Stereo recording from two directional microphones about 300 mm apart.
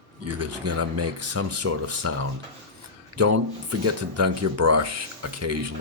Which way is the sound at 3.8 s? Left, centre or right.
Right.